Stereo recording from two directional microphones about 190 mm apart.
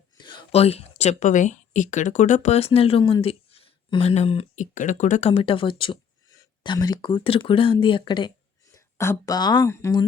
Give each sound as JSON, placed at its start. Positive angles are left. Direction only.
{"t": 0.2, "sound": "speech", "side_deg": 25}